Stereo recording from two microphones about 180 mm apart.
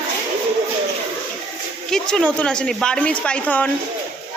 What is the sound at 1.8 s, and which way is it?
A woman's voice, 5° left (ahead or behind).